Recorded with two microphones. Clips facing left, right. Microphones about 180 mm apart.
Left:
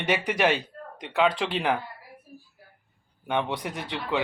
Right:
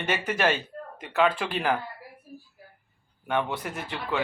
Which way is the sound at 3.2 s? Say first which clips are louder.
Even; 20° left (ahead or behind).